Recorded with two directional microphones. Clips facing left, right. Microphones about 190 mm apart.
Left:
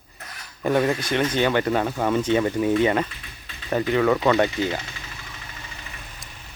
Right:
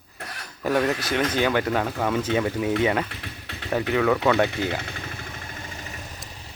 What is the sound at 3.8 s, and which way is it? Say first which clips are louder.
Speech: left 2 dB; centre (ahead or behind).